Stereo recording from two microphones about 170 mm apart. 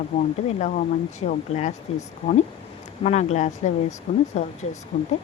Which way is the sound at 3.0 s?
40° left (ahead or behind).